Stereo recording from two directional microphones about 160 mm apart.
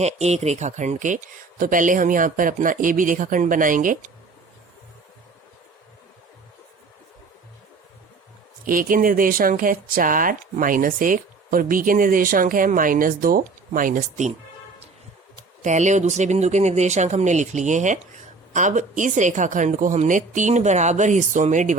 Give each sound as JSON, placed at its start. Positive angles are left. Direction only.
{"t": 0.0, "sound": "speech", "side_deg": -45}
{"t": 8.6, "sound": "speech", "side_deg": -60}
{"t": 15.6, "sound": "speech", "side_deg": -50}